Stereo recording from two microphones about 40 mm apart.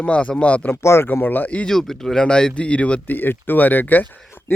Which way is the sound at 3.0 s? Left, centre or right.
Left.